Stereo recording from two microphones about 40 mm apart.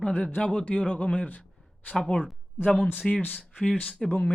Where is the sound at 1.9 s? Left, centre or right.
Left.